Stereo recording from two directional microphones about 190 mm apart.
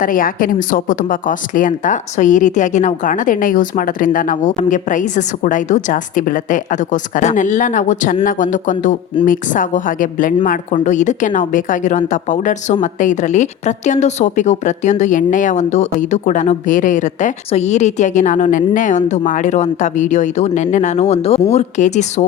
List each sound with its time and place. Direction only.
0.0 s a woman's voice: 45° left (ahead or behind)